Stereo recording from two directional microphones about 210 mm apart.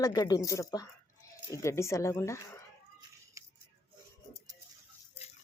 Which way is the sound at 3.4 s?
15° right (ahead or behind).